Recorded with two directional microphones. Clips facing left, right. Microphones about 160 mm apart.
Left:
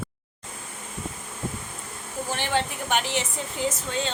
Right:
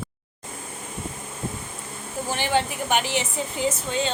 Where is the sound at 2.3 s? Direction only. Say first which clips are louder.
Right 3 dB; 5° right (ahead or behind).